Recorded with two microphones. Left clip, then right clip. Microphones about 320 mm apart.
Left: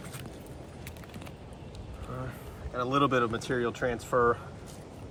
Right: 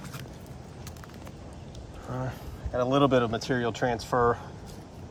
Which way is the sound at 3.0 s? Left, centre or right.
Right.